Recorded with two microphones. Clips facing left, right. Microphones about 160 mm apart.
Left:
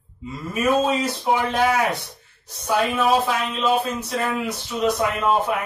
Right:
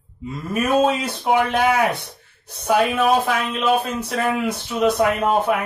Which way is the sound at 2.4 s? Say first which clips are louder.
Right 3 dB; 55° right (ahead or behind).